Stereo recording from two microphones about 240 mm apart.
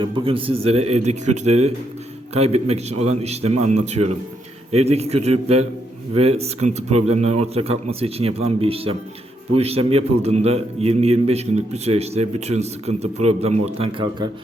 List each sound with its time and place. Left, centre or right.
0.0 s a man's voice: right